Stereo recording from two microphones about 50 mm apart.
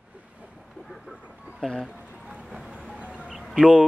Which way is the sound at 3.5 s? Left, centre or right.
Centre.